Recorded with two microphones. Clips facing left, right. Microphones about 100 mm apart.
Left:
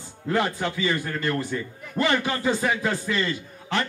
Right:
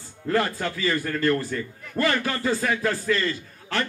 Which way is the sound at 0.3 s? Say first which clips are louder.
Even; 15° left (ahead or behind).